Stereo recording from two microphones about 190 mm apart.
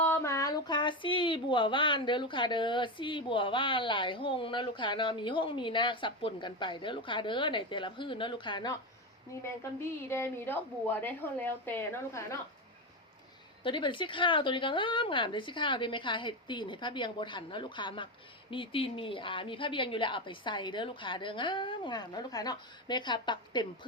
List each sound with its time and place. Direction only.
0.0 s speech: 10° left (ahead or behind)
10.1 s a woman's voice: 10° left (ahead or behind)
13.7 s speech: 25° left (ahead or behind)